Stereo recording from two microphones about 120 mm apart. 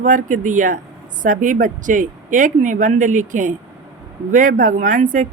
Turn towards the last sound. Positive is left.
turn(degrees=-90)